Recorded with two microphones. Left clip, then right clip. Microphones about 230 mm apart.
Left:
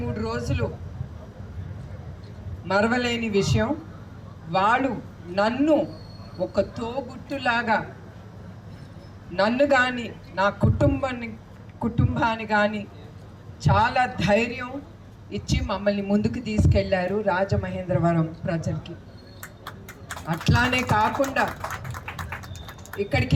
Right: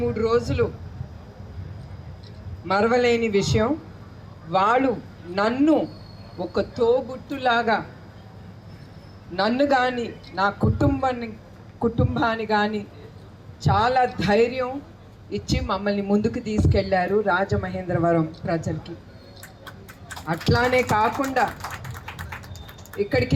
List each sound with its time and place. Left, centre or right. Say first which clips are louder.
0.2 s a man's voice: right 8 dB; right
2.6 s a man's voice: right 3 dB; right
9.3 s a man's voice: left 1 dB; centre
20.2 s a man's voice: right 2 dB; right
23.0 s a man's voice: right 3 dB; centre